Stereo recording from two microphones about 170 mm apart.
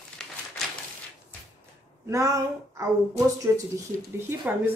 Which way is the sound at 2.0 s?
20° right (ahead or behind).